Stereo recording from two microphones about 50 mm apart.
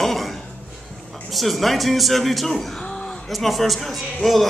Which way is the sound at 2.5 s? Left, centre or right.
Centre.